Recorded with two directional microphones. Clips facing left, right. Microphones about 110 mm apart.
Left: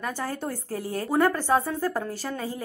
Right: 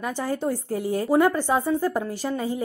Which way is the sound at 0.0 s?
15° right (ahead or behind).